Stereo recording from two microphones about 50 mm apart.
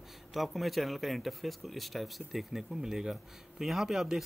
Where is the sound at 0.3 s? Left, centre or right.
Centre.